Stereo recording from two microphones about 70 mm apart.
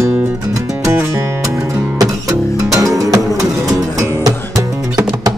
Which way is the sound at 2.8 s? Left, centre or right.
Right.